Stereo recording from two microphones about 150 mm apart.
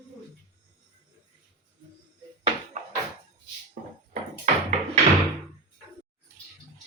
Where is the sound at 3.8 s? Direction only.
70° right (ahead or behind).